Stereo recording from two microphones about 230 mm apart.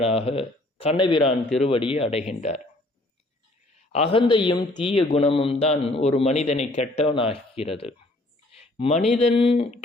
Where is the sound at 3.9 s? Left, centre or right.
Left.